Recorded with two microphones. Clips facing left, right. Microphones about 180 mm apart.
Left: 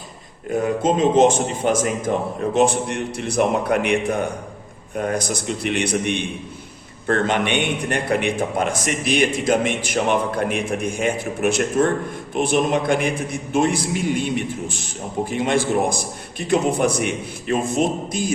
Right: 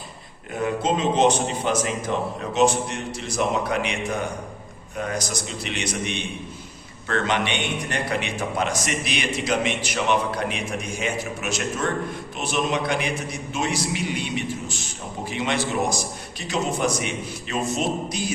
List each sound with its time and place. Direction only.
0.5 s a man's voice: 50° left (ahead or behind)